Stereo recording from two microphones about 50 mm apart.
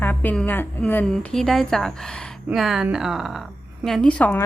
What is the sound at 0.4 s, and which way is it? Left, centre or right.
Speech, left.